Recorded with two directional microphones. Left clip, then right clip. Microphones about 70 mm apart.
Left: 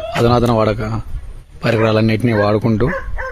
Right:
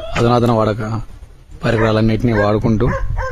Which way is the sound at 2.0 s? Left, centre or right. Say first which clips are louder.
Left 1 dB; centre.